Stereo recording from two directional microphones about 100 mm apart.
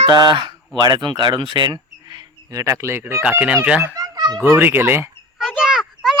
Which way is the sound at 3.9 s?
35° right (ahead or behind).